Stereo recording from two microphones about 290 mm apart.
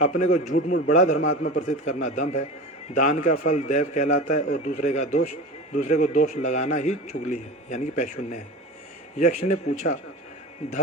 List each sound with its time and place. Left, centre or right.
0.0 s a man's voice: left